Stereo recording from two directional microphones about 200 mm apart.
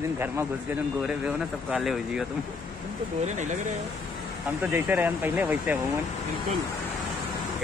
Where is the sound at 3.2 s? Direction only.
35° right (ahead or behind).